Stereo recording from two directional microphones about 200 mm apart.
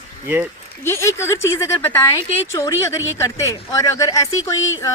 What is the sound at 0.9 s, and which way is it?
A woman's voice, 15° left (ahead or behind).